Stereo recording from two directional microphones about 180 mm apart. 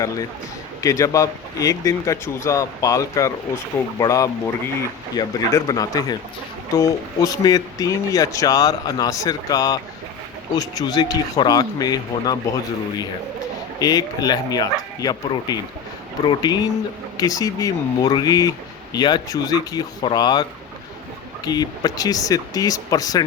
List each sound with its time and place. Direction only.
0.8 s speech: 15° left (ahead or behind)
13.7 s speech: 20° left (ahead or behind)